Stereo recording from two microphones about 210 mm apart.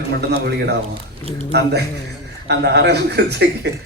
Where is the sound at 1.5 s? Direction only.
50° right (ahead or behind).